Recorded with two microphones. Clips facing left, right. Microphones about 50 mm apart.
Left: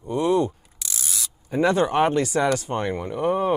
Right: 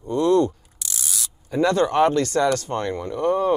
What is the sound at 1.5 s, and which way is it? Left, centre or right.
Speech, centre.